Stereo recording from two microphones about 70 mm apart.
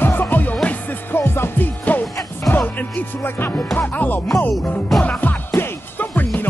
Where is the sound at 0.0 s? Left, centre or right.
Left.